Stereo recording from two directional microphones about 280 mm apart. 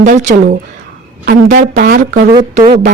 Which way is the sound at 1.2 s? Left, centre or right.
Right.